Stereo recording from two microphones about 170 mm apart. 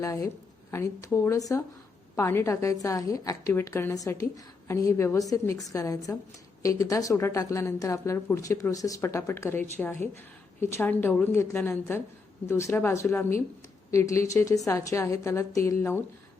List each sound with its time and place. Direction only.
0.0 s a woman's voice: 20° left (ahead or behind)